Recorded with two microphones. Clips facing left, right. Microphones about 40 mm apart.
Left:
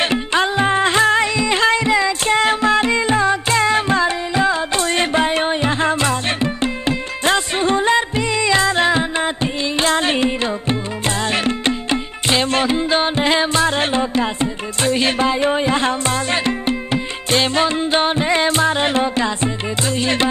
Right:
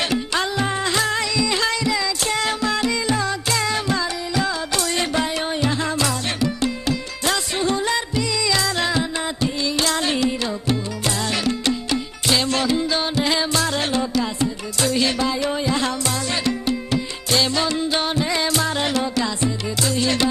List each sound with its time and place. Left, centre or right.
0.0 s music: left